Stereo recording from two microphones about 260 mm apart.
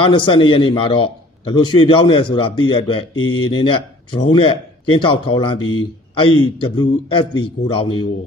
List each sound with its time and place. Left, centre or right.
0.0 s a man's voice: centre